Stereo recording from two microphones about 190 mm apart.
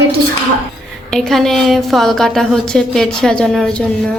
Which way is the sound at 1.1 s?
Centre (ahead or behind).